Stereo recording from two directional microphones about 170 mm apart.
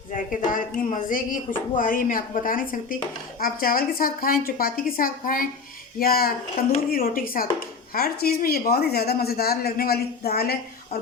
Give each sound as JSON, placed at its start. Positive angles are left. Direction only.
{"t": 0.1, "sound": "a woman's voice", "side_deg": 50}